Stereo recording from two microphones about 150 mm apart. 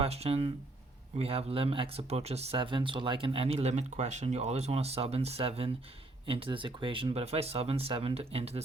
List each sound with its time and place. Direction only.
0.0 s speech: 40° right (ahead or behind)